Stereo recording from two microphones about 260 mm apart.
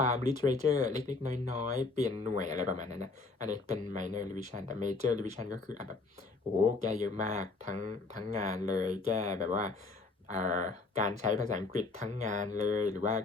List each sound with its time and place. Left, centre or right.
0.0 s a sound: right
0.4 s speech: right
6.8 s speech: right